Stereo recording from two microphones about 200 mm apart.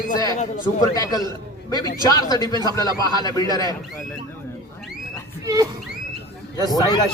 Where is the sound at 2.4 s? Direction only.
20° right (ahead or behind).